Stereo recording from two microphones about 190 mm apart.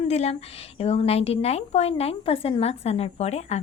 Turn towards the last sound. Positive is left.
turn(degrees=35)  # may be behind; listen again after turning